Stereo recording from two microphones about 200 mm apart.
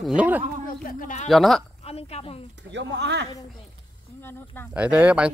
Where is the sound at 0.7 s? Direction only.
40° left (ahead or behind).